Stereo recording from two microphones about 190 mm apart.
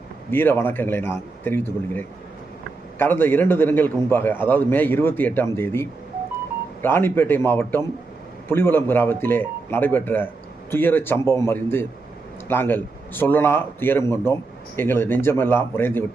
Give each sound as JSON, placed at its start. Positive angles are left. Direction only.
{"t": 0.3, "sound": "a man's voice", "side_deg": 10}